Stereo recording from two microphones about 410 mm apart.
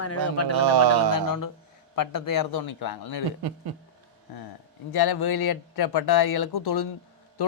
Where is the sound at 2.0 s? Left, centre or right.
Left.